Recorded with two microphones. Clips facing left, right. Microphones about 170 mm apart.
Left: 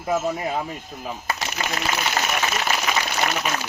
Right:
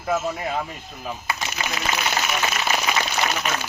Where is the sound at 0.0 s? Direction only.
10° left (ahead or behind).